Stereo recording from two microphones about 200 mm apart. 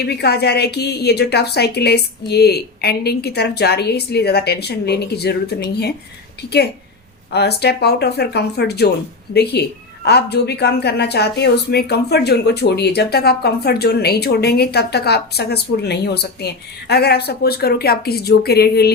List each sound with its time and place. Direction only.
0.0 s a woman's voice: 55° left (ahead or behind)
7.3 s a woman's voice: 55° left (ahead or behind)